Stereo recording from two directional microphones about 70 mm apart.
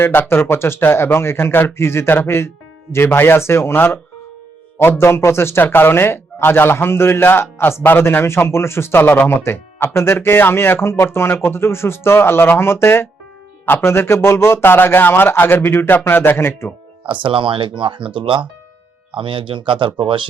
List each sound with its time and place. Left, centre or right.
0.0 s speech: left